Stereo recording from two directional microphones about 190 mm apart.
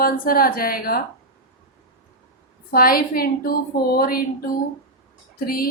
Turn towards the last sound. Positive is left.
turn(degrees=50)  # may be behind; listen again after turning